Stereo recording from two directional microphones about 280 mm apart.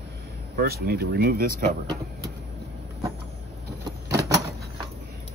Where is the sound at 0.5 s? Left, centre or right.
Right.